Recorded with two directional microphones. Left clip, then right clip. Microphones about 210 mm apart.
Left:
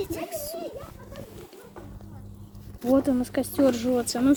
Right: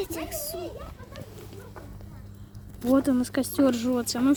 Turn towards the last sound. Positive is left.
turn(degrees=-10)  # may be behind; listen again after turning